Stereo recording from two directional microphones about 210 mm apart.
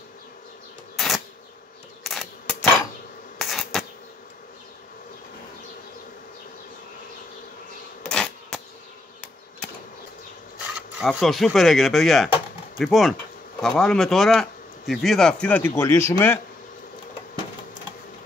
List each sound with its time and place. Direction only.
0.9 s a sound: centre (ahead or behind)
2.0 s camera: centre (ahead or behind)
3.3 s insect: centre (ahead or behind)
8.0 s bee: 5° left (ahead or behind)
11.0 s speech: centre (ahead or behind)